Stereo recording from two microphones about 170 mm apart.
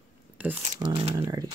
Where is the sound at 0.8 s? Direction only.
35° right (ahead or behind).